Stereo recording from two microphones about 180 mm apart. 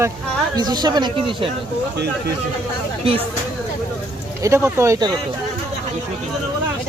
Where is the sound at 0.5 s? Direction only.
25° right (ahead or behind).